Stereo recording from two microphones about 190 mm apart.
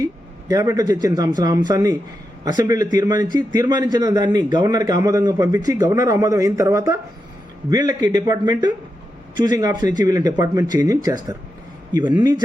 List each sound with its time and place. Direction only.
0.0 s a man's voice: 20° right (ahead or behind)